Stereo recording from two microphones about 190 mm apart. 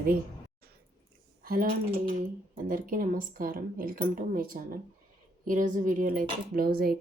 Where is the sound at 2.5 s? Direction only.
45° right (ahead or behind).